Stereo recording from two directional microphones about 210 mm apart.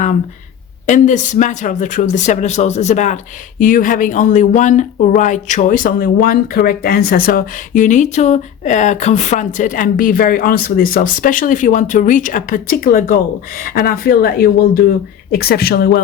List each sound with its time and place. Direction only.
0.9 s speech: 35° left (ahead or behind)